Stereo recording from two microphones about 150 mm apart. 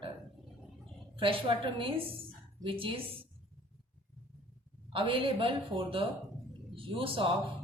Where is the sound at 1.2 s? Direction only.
35° right (ahead or behind).